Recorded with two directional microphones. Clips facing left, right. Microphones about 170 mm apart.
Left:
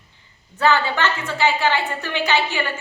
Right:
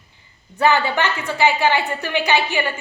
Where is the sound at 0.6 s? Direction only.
15° right (ahead or behind).